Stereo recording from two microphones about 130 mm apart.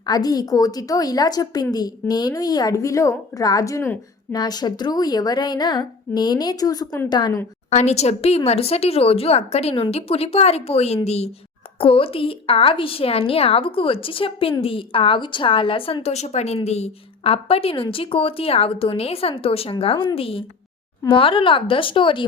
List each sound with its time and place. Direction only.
0.0 s a woman's voice: 30° left (ahead or behind)
7.7 s a woman's voice: 60° left (ahead or behind)
11.8 s a woman's voice: 45° left (ahead or behind)